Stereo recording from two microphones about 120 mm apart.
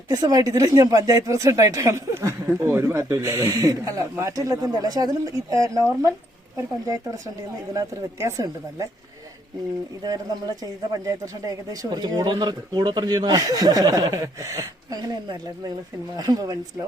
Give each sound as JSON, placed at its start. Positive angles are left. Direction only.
{"t": 0.1, "sound": "speech", "side_deg": -30}
{"t": 7.7, "sound": "speech", "side_deg": -30}
{"t": 10.0, "sound": "speech", "side_deg": -35}